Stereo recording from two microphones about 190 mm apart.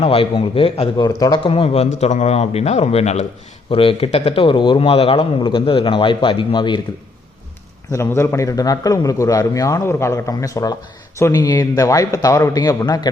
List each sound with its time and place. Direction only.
0.0 s a man's voice: 30° left (ahead or behind)
7.9 s a man's voice: 15° left (ahead or behind)